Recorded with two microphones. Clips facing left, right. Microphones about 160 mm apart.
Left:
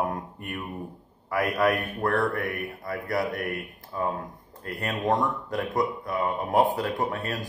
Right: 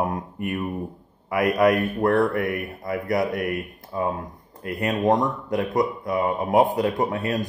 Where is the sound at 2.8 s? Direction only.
20° right (ahead or behind).